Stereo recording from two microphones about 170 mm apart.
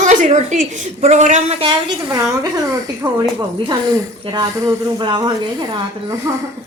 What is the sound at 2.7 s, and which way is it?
A woman's voice, 25° right (ahead or behind).